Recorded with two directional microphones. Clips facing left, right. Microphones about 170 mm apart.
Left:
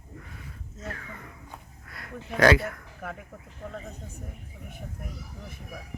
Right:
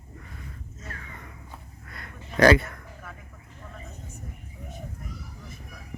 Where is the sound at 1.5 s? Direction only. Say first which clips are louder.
Even; centre (ahead or behind).